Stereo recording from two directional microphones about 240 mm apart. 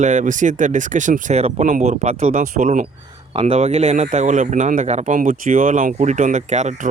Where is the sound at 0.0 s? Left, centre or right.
Right.